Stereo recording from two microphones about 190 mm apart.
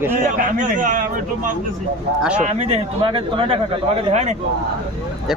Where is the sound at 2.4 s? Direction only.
35° right (ahead or behind).